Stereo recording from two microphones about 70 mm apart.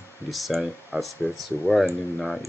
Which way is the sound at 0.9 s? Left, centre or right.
Right.